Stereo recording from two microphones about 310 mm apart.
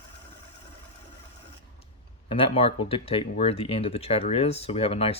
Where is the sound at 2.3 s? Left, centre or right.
Centre.